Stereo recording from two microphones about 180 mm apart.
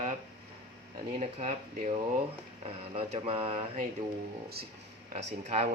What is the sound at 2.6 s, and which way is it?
Speech, 35° right (ahead or behind).